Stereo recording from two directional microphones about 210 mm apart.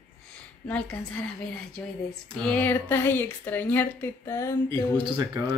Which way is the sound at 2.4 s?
5° left (ahead or behind).